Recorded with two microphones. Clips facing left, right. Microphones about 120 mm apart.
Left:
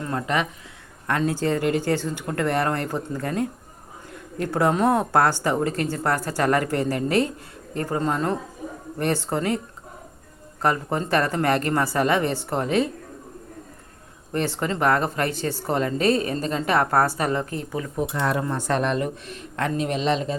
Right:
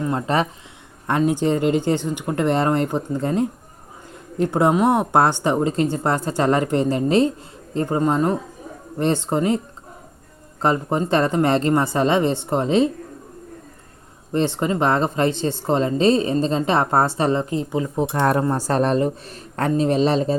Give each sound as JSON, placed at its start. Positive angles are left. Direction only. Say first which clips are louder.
{"t": 0.0, "sound": "speech", "louder": "right 4 dB", "side_deg": -25}
{"t": 10.6, "sound": "speech", "louder": "right 3 dB", "side_deg": -20}
{"t": 14.3, "sound": "speech", "louder": "right 5 dB", "side_deg": -20}
{"t": 18.1, "sound": "speech", "louder": "right 6 dB", "side_deg": -45}